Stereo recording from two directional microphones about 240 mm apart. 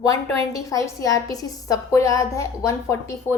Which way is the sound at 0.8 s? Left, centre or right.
Centre.